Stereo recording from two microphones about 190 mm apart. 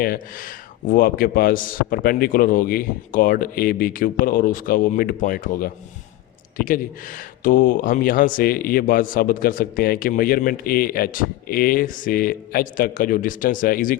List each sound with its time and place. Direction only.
0.0 s speech: 50° left (ahead or behind)